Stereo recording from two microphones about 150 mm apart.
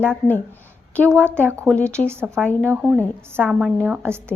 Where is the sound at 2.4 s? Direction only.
5° left (ahead or behind).